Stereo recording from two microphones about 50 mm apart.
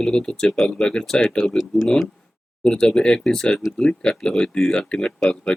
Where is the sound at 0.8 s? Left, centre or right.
Centre.